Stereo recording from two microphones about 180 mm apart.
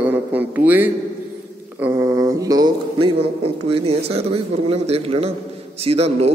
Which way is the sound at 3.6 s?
35° right (ahead or behind).